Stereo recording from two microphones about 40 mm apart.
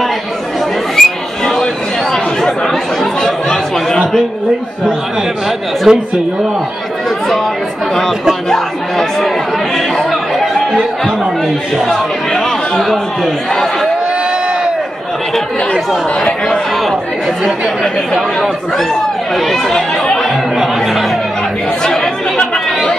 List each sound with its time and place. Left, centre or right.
0.9 s a sound: centre
3.2 s chatter: centre
5.9 s speech: centre
8.5 s chatter: centre
11.4 s speech: centre
19.3 s speech: centre
20.5 s speech: centre
21.8 s chatter: centre